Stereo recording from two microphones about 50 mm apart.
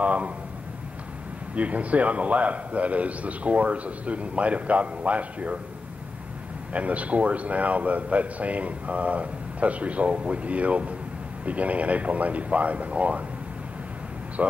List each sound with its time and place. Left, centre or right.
0.0 s speech: right
1.5 s speech: right
6.7 s speech: right
14.4 s speech: right